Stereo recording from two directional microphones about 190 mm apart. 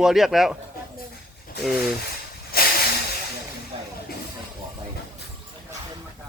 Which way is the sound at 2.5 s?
55° left (ahead or behind).